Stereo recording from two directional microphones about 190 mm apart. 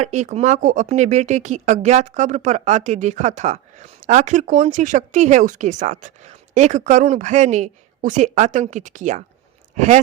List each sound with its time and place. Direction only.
0.0 s speech: 35° right (ahead or behind)